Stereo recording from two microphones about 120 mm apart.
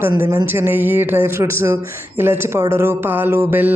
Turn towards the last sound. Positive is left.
turn(degrees=-15)  # may be behind; listen again after turning